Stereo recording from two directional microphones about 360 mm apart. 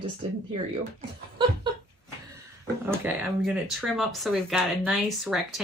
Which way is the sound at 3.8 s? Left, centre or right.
Centre.